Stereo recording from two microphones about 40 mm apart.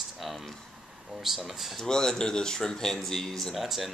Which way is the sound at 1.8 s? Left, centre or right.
Centre.